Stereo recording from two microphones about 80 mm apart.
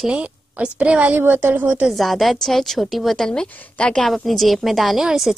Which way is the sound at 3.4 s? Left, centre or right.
Left.